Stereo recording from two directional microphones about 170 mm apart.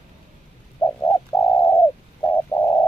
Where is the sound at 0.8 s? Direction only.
15° left (ahead or behind).